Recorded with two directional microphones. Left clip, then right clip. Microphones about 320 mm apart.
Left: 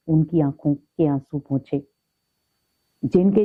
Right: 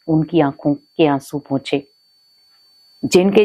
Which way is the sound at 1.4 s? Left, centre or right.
Centre.